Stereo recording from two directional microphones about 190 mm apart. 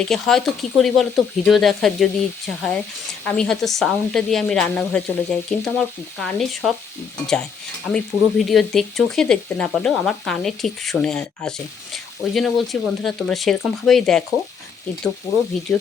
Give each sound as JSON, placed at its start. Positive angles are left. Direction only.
{"t": 0.0, "sound": "speech", "side_deg": 5}
{"t": 7.9, "sound": "speech", "side_deg": 0}